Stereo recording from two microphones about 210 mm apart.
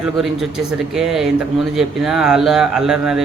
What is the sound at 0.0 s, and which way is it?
A man's voice, centre (ahead or behind).